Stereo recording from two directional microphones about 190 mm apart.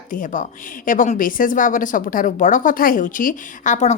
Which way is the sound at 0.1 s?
45° left (ahead or behind).